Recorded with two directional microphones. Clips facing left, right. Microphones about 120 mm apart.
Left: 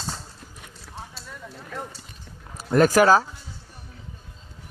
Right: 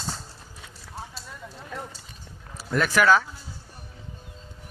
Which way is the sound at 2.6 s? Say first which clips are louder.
Left 6 dB; 45° left (ahead or behind).